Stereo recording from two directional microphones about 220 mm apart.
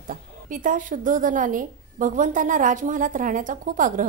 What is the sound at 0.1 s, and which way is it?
A woman's voice, 35° right (ahead or behind).